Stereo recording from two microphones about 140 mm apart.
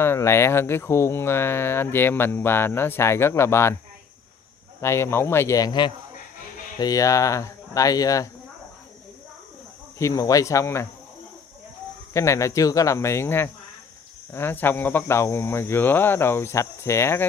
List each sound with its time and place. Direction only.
0.0 s speech: 20° left (ahead or behind)
4.8 s speech: 20° left (ahead or behind)
9.9 s speech: 20° left (ahead or behind)
12.1 s speech: 20° left (ahead or behind)